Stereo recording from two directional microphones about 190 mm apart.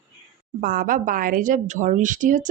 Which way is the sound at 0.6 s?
45° right (ahead or behind).